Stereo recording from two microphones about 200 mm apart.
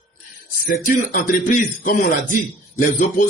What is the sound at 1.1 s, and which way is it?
A man's voice, 45° left (ahead or behind).